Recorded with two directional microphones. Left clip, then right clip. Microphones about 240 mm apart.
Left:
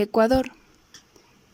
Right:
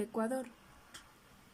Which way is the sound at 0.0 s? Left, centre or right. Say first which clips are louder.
Left 17 dB; left.